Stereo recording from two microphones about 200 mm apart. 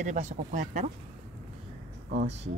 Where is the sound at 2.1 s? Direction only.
35° right (ahead or behind).